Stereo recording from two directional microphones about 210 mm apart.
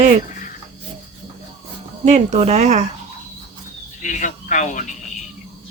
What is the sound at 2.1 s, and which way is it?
Speech, 35° right (ahead or behind).